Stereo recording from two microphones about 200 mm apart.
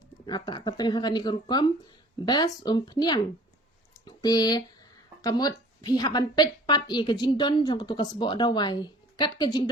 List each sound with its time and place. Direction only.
0.3 s a woman's voice: 20° left (ahead or behind)